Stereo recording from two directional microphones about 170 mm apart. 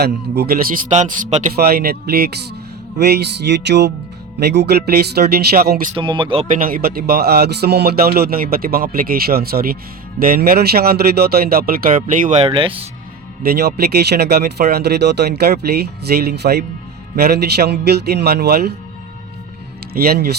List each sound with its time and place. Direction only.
0.0 s a man's voice: 65° right (ahead or behind); by 1.5 s 45° right (ahead or behind)
1.5 s speech: 65° right (ahead or behind)
3.0 s music: 75° right (ahead or behind)
4.4 s speech: 75° right (ahead or behind)
6.0 s speech: 30° right (ahead or behind)
6.6 s speech: 60° right (ahead or behind)
12.5 s speech: 30° right (ahead or behind)
13.4 s speech: 65° right (ahead or behind)
19.9 s speech: 65° right (ahead or behind)